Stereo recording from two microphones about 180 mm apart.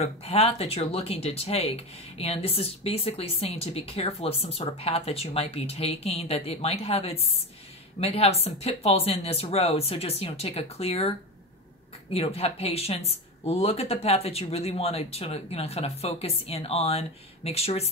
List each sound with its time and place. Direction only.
0.0 s speech: 35° left (ahead or behind)